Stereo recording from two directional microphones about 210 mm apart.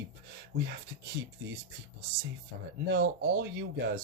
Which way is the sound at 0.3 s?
55° right (ahead or behind).